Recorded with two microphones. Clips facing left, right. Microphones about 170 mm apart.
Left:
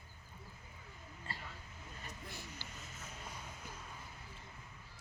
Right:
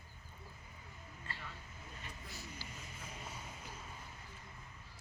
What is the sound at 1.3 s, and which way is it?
Vehicle, 35° left (ahead or behind).